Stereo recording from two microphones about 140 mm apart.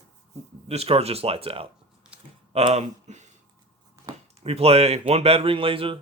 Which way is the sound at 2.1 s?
10° right (ahead or behind).